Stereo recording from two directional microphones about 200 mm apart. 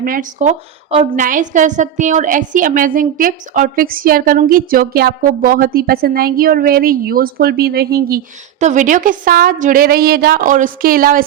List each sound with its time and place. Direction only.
0.0 s a woman's voice: 45° right (ahead or behind)